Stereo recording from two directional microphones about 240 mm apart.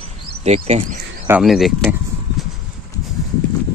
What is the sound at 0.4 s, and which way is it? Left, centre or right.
Speech, right.